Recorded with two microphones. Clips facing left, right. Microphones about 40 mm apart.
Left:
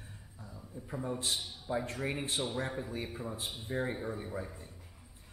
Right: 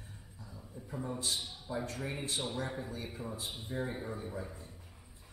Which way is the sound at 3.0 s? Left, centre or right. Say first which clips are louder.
Left 2 dB; centre.